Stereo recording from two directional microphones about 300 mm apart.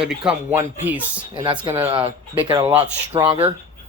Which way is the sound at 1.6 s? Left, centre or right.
Centre.